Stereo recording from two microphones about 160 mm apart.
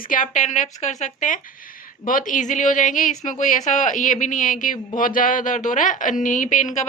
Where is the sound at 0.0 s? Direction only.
55° left (ahead or behind).